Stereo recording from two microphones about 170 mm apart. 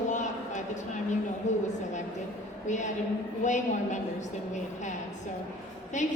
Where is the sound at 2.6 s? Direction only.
45° left (ahead or behind).